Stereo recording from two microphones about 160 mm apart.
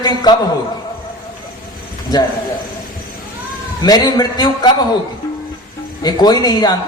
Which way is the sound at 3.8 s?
25° left (ahead or behind).